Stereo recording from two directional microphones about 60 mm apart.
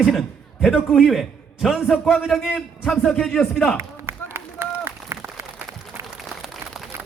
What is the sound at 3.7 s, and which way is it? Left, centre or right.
Run, right.